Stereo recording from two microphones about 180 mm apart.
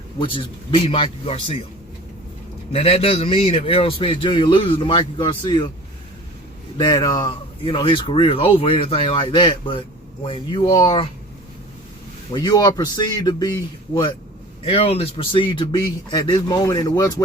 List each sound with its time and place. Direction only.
0.2 s speech: 30° left (ahead or behind)
2.7 s a man's voice: 35° left (ahead or behind)
6.7 s speech: 20° left (ahead or behind)
12.3 s speech: 25° left (ahead or behind)
14.6 s speech: 30° left (ahead or behind)